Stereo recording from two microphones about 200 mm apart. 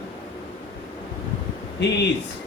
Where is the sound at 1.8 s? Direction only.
60° left (ahead or behind).